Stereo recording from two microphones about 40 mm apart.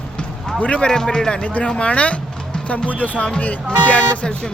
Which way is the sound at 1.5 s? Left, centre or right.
Left.